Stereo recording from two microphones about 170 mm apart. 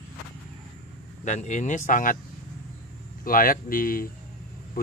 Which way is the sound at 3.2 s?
55° left (ahead or behind).